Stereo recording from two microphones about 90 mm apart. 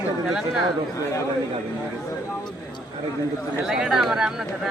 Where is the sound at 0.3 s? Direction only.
5° right (ahead or behind).